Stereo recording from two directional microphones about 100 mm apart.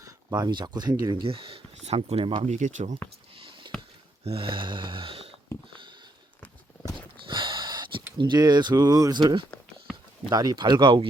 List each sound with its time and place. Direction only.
0.0 s speech: 40° right (ahead or behind); by 2.5 s 65° right (ahead or behind)
3.0 s speech: 15° left (ahead or behind)
3.3 s a sound: 60° right (ahead or behind)
4.2 s snoring: 75° right (ahead or behind)
7.3 s a sound: 55° right (ahead or behind)
8.2 s speech: 45° right (ahead or behind)